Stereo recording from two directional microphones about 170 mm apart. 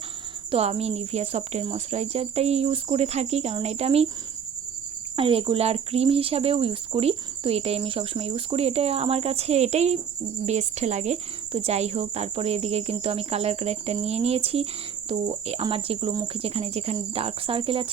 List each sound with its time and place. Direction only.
0.5 s speech: 40° right (ahead or behind)
5.1 s speech: 35° right (ahead or behind)